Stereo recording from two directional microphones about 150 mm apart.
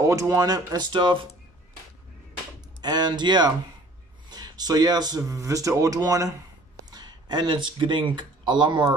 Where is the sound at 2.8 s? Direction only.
30° right (ahead or behind).